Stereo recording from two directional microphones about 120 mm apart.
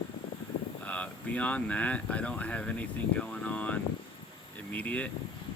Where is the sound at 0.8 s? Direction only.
10° left (ahead or behind).